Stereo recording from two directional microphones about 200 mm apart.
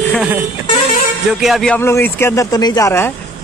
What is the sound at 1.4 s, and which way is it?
A man's voice, centre (ahead or behind).